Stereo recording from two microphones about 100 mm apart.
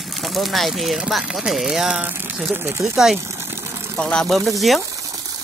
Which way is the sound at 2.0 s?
20° right (ahead or behind).